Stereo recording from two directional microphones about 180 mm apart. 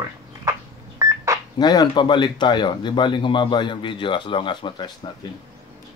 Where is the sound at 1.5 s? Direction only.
25° left (ahead or behind).